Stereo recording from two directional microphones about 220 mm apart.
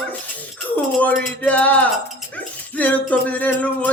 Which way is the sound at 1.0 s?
5° left (ahead or behind).